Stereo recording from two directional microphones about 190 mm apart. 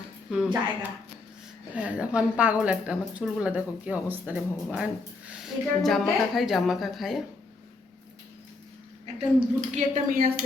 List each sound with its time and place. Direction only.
0.3 s a woman's voice: 5° right (ahead or behind)
9.1 s a woman's voice: 35° right (ahead or behind)